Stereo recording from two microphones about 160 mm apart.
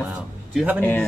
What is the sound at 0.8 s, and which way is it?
Speech, 15° left (ahead or behind).